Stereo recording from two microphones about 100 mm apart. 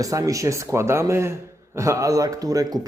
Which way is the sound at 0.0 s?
35° right (ahead or behind).